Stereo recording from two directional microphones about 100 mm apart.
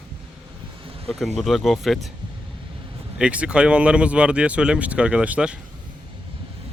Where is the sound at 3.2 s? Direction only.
10° right (ahead or behind).